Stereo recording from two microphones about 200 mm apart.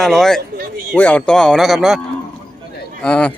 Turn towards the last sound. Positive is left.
turn(degrees=5)  # may be behind; listen again after turning